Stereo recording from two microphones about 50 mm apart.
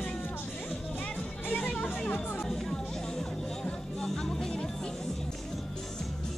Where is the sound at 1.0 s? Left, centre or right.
Left.